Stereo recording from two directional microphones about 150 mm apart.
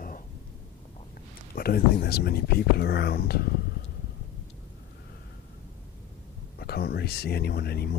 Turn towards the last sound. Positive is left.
turn(degrees=90)